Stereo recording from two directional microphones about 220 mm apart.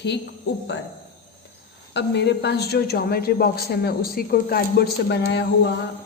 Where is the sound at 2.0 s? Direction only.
50° left (ahead or behind).